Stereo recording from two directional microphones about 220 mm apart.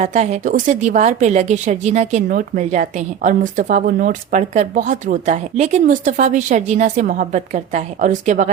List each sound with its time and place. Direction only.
0.0 s speech: 30° right (ahead or behind)